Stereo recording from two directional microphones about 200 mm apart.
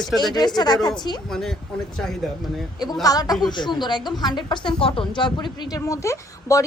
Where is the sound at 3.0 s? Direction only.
20° left (ahead or behind).